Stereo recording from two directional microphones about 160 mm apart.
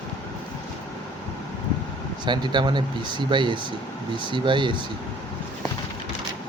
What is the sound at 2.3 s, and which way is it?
Speech, 30° right (ahead or behind).